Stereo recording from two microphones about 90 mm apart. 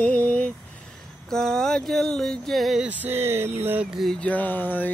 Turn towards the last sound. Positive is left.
turn(degrees=20)  # may be behind; listen again after turning